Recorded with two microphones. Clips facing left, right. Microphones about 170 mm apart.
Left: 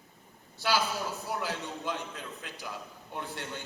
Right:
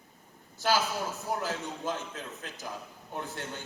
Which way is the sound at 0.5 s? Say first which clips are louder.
Right 1 dB; 45° right (ahead or behind).